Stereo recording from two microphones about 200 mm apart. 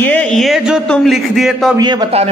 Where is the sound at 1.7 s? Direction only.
20° right (ahead or behind).